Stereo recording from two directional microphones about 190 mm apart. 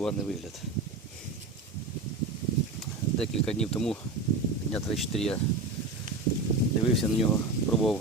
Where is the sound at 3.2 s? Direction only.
5° left (ahead or behind).